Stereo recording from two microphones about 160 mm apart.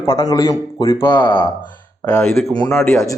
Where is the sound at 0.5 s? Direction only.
35° left (ahead or behind).